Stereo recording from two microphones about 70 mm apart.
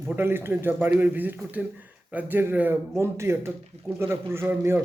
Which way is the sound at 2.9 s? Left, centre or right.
Right.